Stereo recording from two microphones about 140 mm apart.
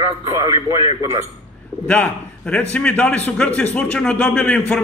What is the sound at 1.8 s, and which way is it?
A man's voice, 10° left (ahead or behind).